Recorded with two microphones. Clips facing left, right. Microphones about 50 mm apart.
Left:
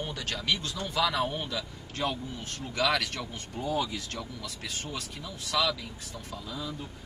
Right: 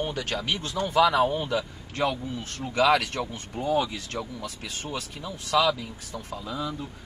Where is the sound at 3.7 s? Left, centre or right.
Right.